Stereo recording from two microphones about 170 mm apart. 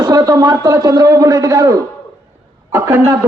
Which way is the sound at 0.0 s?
20° right (ahead or behind).